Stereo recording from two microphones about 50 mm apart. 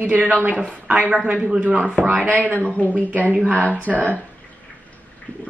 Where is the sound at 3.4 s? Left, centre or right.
Right.